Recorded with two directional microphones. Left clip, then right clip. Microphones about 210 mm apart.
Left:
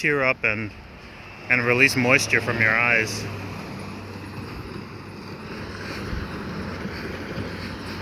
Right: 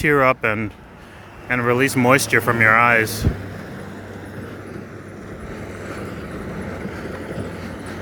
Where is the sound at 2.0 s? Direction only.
30° right (ahead or behind).